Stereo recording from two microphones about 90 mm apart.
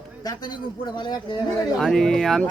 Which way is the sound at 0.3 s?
55° left (ahead or behind).